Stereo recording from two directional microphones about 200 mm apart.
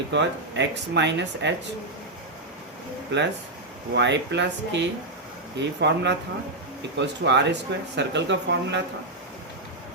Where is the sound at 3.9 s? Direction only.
60° right (ahead or behind).